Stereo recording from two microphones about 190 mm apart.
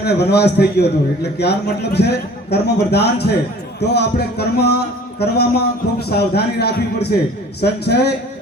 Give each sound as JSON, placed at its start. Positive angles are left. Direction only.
{"t": 0.0, "sound": "a man's voice", "side_deg": 60}